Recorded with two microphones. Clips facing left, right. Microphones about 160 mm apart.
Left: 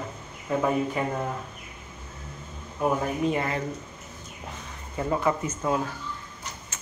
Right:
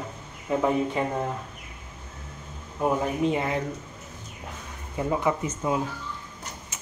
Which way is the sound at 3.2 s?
20° right (ahead or behind).